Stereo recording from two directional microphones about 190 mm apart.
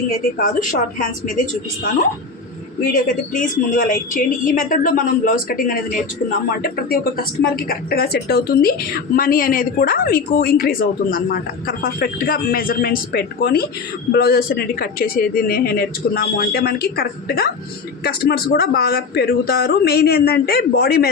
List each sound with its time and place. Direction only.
0.3 s a woman's voice: 40° left (ahead or behind)
2.8 s a woman's voice: 45° left (ahead or behind)